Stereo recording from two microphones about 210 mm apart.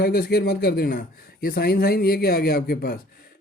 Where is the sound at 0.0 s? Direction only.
50° left (ahead or behind).